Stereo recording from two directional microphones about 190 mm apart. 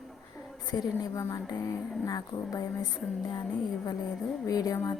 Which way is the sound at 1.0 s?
15° left (ahead or behind).